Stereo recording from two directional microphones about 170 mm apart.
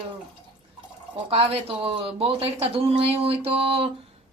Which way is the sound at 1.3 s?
35° right (ahead or behind).